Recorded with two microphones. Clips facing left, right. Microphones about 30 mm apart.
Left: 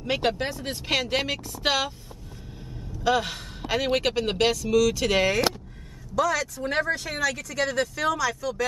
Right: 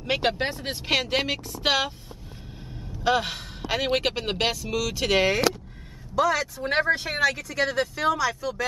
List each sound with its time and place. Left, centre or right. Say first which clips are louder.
0.0 s a man's voice: right 1 dB; centre
3.0 s a man's voice: even; centre
7.3 s a man's voice: right 1 dB; centre